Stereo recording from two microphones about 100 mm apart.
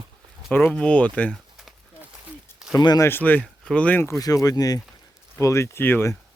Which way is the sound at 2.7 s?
45° left (ahead or behind).